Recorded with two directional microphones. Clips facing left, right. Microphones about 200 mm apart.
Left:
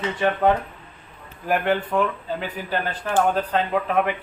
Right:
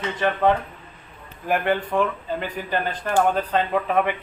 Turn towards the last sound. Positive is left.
turn(degrees=0)  # may be behind; listen again after turning